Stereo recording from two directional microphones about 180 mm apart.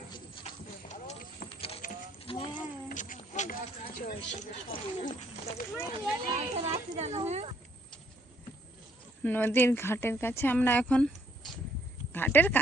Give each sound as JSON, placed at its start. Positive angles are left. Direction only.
{"t": 0.4, "sound": "clip-clop", "side_deg": 40}
{"t": 2.2, "sound": "a sound", "side_deg": 30}
{"t": 2.9, "sound": "speech", "side_deg": 45}
{"t": 6.3, "sound": "a child's voice", "side_deg": -35}
{"t": 9.2, "sound": "speech", "side_deg": 10}